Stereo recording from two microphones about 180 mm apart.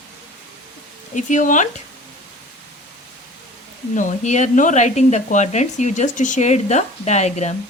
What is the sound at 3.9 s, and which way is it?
A woman's voice, 45° left (ahead or behind).